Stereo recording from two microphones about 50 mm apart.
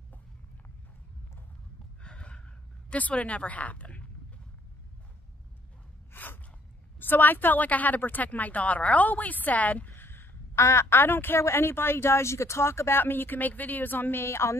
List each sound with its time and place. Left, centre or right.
2.0 s gasp: left
2.9 s speech: left
6.1 s gasp: left
7.0 s a woman's voice: left
9.9 s a sound: left
11.4 s speech: left
13.0 s a woman's voice: left
14.2 s speech: left